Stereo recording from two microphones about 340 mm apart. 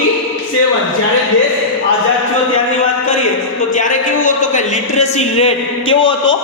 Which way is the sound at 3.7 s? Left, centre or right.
Left.